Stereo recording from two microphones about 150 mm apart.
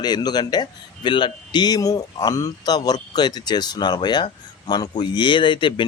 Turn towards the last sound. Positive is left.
turn(degrees=30)  # may be behind; listen again after turning